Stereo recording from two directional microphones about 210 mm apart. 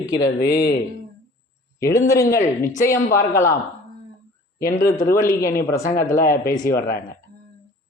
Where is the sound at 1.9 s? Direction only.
15° left (ahead or behind).